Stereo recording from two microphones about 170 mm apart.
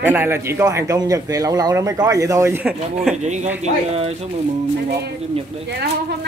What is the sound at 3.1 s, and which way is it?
Speech, 45° right (ahead or behind).